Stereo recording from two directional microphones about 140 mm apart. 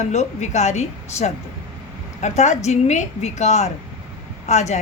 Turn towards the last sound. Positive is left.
turn(degrees=55)  # may be behind; listen again after turning